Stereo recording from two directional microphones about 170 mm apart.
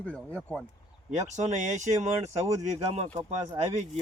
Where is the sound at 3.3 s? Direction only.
40° right (ahead or behind).